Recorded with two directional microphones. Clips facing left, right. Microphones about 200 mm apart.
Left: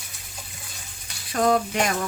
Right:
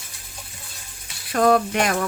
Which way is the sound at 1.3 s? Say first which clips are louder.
Right 3 dB; 60° right (ahead or behind).